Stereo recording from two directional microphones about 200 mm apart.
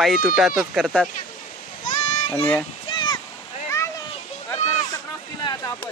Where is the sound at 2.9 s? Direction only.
20° left (ahead or behind).